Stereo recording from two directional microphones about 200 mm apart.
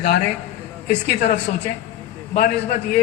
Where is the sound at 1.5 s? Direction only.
45° left (ahead or behind).